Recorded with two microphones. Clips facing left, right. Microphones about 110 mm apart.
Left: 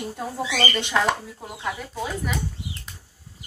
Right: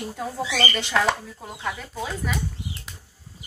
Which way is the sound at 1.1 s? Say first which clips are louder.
Even; 5° left (ahead or behind).